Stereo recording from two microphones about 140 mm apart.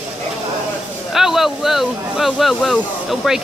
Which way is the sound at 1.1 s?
Centre (ahead or behind).